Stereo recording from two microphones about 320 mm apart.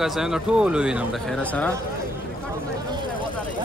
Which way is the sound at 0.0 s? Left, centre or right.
Centre.